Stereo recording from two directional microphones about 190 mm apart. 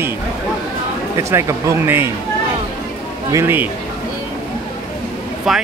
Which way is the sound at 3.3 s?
10° right (ahead or behind).